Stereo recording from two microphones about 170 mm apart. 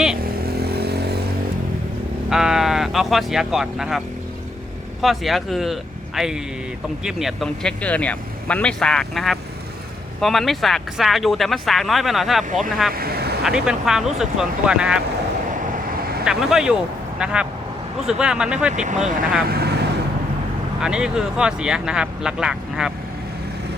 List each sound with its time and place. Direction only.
0.4 s vehicle: 70° right (ahead or behind)
2.3 s speech: 5° right (ahead or behind)
12.9 s speech: 65° right (ahead or behind)
13.4 s speech: 5° right (ahead or behind)
16.2 s speech: 5° right (ahead or behind)
19.5 s vehicle: 70° right (ahead or behind)
20.8 s speech: 5° right (ahead or behind)